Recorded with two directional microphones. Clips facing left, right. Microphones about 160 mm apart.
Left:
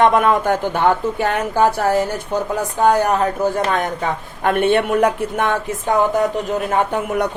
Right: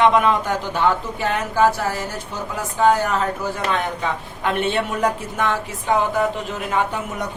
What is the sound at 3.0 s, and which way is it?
A man's voice, 45° left (ahead or behind).